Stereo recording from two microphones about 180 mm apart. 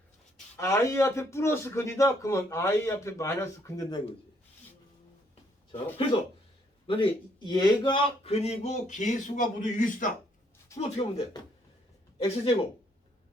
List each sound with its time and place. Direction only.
0.5 s a man's voice: 15° left (ahead or behind)
5.7 s a man's voice: 30° left (ahead or behind)
10.8 s a man's voice: 35° left (ahead or behind)